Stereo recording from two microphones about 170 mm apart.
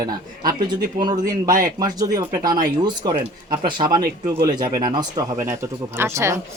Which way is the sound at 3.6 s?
25° right (ahead or behind).